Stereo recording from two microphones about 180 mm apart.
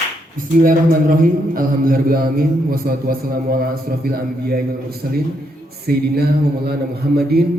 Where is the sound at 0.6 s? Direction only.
50° right (ahead or behind).